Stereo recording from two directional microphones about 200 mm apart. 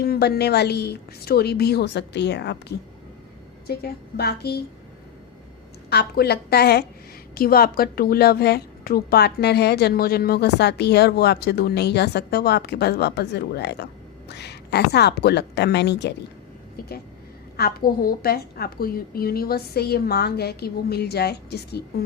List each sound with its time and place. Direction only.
0.0 s a woman's voice: 50° left (ahead or behind)
5.9 s a woman's voice: 55° left (ahead or behind)
17.6 s a woman's voice: 45° left (ahead or behind)